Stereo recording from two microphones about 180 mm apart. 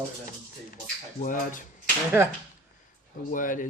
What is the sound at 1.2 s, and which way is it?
Speech, 45° left (ahead or behind).